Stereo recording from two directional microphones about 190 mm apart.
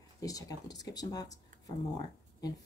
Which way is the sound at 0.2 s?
20° left (ahead or behind).